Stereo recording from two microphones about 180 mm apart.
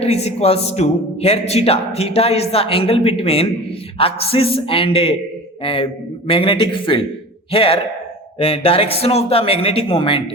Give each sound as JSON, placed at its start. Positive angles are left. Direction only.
{"t": 0.0, "sound": "a man's voice", "side_deg": 35}